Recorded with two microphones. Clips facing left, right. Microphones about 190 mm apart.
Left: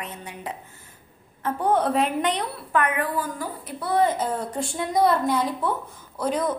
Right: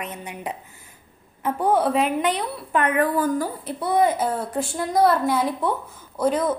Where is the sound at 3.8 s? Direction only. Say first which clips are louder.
Right 2 dB; 15° right (ahead or behind).